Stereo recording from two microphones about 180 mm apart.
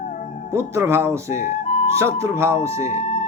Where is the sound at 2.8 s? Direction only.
40° left (ahead or behind).